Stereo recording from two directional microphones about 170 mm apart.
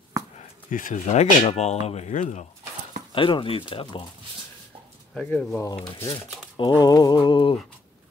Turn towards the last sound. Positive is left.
turn(degrees=30)  # may be behind; listen again after turning